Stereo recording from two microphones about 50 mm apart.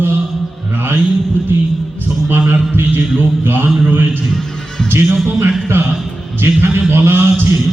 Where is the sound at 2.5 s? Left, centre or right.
Right.